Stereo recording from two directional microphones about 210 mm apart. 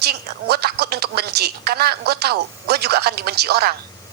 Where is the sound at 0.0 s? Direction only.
50° right (ahead or behind).